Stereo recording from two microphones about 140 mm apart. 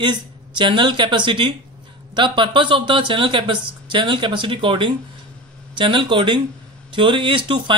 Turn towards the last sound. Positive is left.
turn(degrees=-35)  # may be behind; listen again after turning